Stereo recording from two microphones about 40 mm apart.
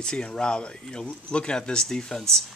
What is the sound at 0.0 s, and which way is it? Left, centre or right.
Speech, left.